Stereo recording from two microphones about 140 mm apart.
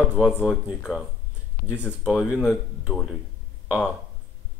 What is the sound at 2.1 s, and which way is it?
Speech, 15° left (ahead or behind).